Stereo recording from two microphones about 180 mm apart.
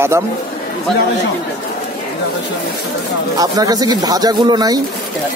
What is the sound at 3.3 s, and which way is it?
Speech, 20° right (ahead or behind).